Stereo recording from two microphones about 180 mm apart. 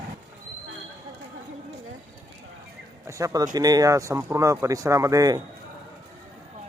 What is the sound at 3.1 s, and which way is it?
Speech, 15° right (ahead or behind).